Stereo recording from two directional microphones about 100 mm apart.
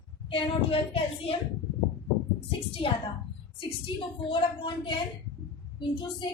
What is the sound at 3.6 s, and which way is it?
A woman's voice, 55° left (ahead or behind).